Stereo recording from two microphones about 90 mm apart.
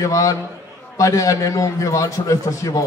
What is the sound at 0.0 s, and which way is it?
A man's voice, 35° left (ahead or behind).